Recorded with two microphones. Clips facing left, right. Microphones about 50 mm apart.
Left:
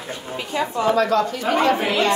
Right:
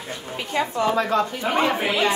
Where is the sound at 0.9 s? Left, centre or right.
Right.